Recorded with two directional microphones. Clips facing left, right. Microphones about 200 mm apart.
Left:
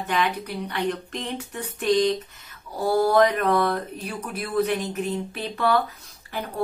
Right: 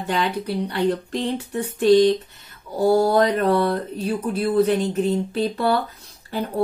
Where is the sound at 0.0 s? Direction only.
30° right (ahead or behind).